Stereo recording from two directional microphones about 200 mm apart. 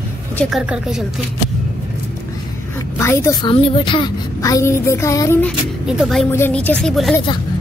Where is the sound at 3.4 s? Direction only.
25° left (ahead or behind).